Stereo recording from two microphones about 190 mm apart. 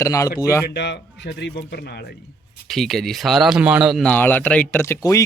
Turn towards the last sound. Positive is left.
turn(degrees=15)  # may be behind; listen again after turning